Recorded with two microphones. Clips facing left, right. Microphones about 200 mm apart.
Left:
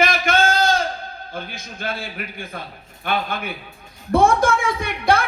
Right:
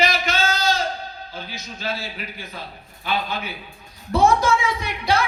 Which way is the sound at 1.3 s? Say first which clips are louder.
Left 2 dB; 55° left (ahead or behind).